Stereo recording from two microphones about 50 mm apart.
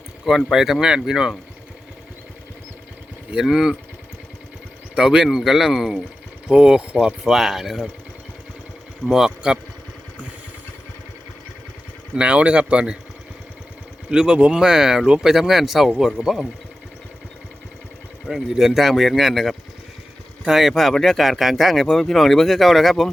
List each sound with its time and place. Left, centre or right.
0.5 s speech: centre
3.3 s speech: centre
4.9 s speech: centre
6.5 s speech: centre
9.0 s speech: centre
12.1 s speech: right
14.1 s speech: centre
18.3 s speech: centre